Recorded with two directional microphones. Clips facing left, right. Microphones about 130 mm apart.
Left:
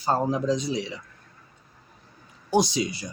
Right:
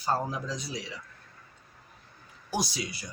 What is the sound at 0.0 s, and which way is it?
Speech, 25° left (ahead or behind).